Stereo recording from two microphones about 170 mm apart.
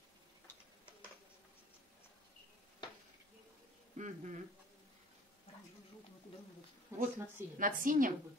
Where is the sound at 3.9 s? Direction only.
45° right (ahead or behind).